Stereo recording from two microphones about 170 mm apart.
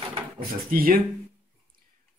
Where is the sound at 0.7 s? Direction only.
60° right (ahead or behind).